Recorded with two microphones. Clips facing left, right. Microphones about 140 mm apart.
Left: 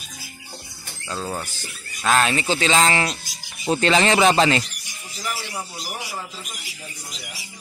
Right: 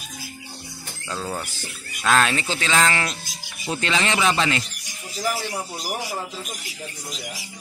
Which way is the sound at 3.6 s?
35° left (ahead or behind).